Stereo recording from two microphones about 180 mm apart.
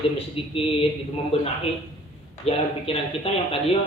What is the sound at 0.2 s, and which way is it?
Speech, 30° left (ahead or behind).